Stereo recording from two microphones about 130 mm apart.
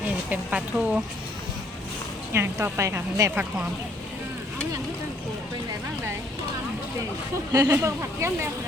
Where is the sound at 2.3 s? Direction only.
20° right (ahead or behind).